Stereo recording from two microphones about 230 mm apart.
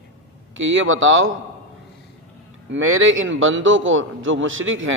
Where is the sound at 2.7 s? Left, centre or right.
Right.